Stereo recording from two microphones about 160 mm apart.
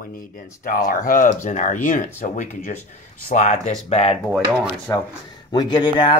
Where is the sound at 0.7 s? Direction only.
60° left (ahead or behind); by 4.2 s 40° left (ahead or behind).